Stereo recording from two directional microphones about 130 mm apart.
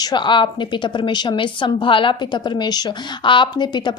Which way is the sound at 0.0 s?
35° left (ahead or behind).